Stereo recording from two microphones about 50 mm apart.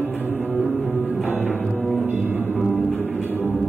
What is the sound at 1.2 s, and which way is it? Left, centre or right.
Music, right.